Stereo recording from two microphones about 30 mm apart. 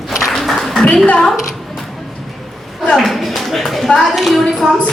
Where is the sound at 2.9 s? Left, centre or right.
Centre.